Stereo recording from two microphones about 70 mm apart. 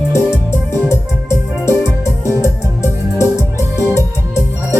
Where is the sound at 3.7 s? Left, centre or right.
Left.